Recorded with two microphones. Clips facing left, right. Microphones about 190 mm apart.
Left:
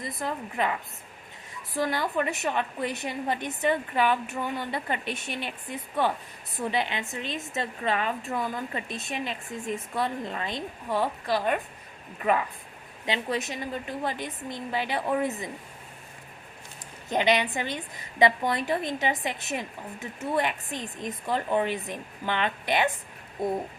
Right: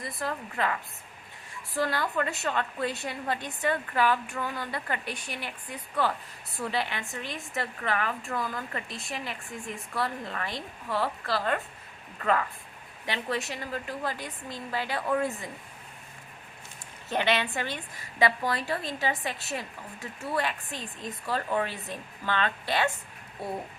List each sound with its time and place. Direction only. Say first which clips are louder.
0.2 s a woman's voice: left 2 dB; 20° left (ahead or behind)
17.1 s a woman's voice: left 3 dB; 15° left (ahead or behind)